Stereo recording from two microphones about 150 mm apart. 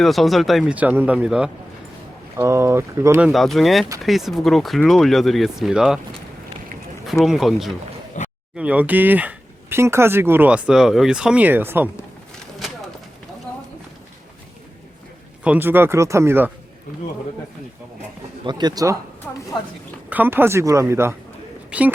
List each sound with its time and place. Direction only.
0.0 s speech: centre (ahead or behind)
2.4 s speech: 20° right (ahead or behind)
3.2 s speech: centre (ahead or behind)
7.0 s speech: centre (ahead or behind)
8.1 s a sound: 55° left (ahead or behind)
8.5 s speech: 10° right (ahead or behind)
15.4 s speech: 15° right (ahead or behind)
18.4 s speech: 30° right (ahead or behind)
19.3 s speech: 10° left (ahead or behind)
20.1 s a woman's voice: 10° right (ahead or behind)